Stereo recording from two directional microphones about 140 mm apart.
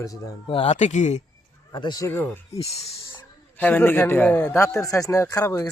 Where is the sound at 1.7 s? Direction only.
30° left (ahead or behind).